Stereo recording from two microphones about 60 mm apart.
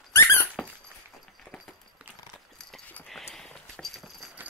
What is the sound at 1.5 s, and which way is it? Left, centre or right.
Clip-clop, centre.